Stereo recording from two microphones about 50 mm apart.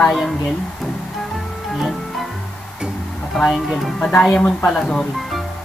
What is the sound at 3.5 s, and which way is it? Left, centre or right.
Speech, centre.